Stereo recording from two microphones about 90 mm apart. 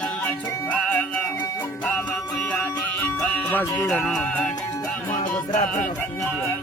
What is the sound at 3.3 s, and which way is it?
Music, 20° left (ahead or behind).